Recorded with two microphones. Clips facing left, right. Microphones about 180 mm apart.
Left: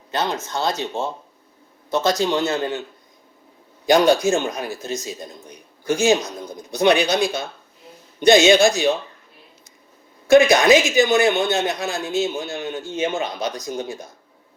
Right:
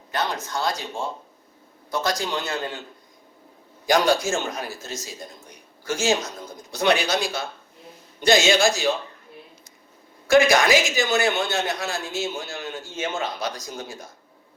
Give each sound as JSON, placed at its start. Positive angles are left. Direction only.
{"t": 0.1, "sound": "speech", "side_deg": 25}
{"t": 3.8, "sound": "a man's voice", "side_deg": 20}
{"t": 10.2, "sound": "speech", "side_deg": 20}